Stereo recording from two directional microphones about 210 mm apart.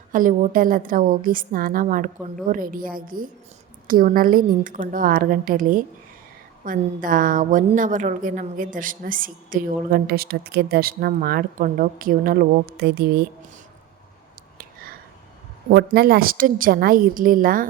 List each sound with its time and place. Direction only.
0.1 s a woman's voice: 40° right (ahead or behind)
14.6 s a sound: 45° right (ahead or behind)
15.7 s a woman's voice: 50° right (ahead or behind)